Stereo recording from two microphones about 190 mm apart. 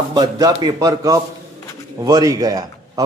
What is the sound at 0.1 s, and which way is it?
A man's voice, 20° right (ahead or behind).